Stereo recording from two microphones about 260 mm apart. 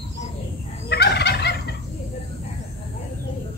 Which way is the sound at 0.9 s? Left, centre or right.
Left.